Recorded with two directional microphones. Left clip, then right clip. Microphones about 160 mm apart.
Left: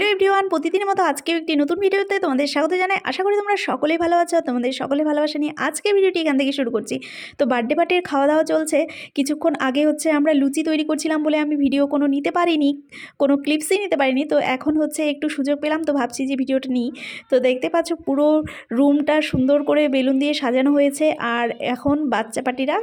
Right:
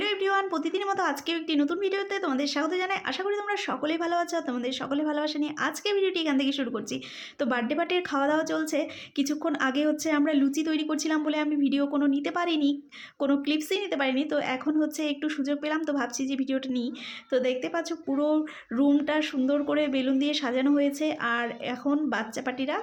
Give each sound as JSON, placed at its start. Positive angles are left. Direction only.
{"t": 0.0, "sound": "a woman's voice", "side_deg": 45}